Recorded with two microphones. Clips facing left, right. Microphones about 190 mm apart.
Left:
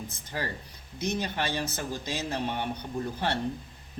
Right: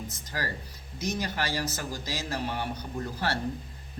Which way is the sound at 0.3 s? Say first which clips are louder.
Left 1 dB; 25° left (ahead or behind).